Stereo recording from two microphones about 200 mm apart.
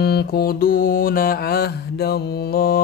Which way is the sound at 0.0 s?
55° left (ahead or behind).